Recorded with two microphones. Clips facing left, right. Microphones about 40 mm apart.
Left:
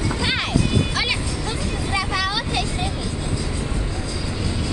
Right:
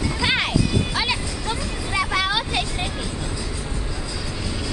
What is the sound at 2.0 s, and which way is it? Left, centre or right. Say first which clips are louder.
Vehicle: right 3 dB; right.